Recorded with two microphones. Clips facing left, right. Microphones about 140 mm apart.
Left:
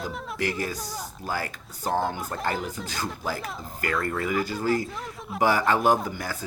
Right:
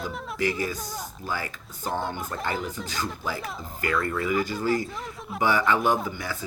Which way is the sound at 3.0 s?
40° left (ahead or behind).